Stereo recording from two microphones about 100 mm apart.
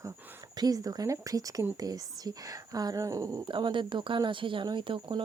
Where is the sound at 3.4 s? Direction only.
55° right (ahead or behind).